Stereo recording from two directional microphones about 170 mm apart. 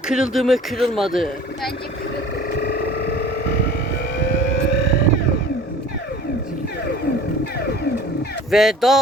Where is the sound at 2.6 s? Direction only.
70° left (ahead or behind).